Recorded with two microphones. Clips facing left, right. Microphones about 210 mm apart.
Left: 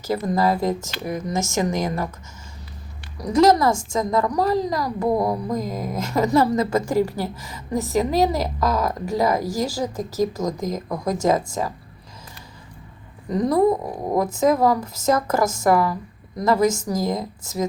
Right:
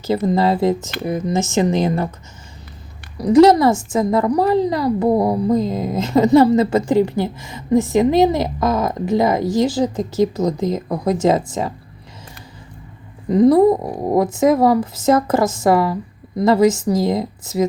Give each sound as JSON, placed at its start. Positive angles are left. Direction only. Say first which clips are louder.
{"t": 0.1, "sound": "a woman's voice", "louder": "right 4 dB", "side_deg": -25}
{"t": 3.2, "sound": "a woman's voice", "louder": "right 6 dB", "side_deg": -30}
{"t": 13.3, "sound": "a woman's voice", "louder": "right 7 dB", "side_deg": -25}